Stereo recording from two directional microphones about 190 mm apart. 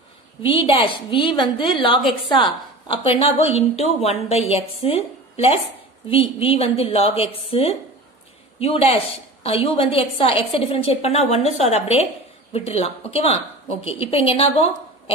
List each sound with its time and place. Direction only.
0.4 s a woman's voice: 30° left (ahead or behind)